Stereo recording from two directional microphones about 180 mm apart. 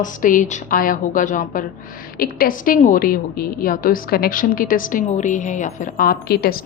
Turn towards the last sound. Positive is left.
turn(degrees=60)  # may be behind; listen again after turning